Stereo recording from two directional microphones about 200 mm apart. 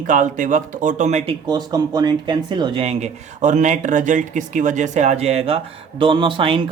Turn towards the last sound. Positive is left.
turn(degrees=-25)  # may be behind; listen again after turning